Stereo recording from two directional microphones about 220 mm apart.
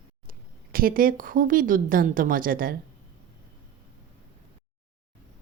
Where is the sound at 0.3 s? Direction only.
40° right (ahead or behind).